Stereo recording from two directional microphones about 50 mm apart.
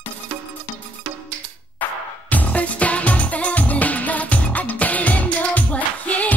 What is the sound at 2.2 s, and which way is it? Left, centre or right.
Music, left.